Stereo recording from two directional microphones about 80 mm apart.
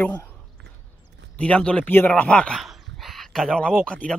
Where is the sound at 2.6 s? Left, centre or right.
Centre.